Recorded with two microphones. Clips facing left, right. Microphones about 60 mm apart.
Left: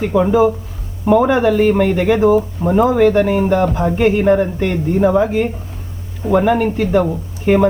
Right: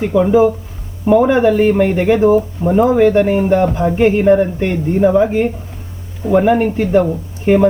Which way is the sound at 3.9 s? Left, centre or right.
Right.